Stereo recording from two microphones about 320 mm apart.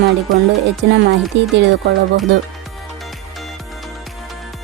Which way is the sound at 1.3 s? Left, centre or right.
Right.